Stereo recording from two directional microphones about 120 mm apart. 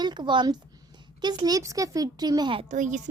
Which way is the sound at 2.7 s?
90° right.